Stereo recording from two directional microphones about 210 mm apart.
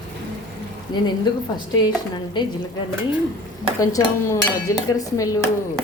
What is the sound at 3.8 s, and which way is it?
A woman's voice, 15° left (ahead or behind).